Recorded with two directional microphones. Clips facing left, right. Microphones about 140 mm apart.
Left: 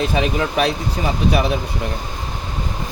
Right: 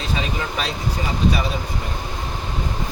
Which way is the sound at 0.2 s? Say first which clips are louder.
Left 7 dB; 60° left (ahead or behind).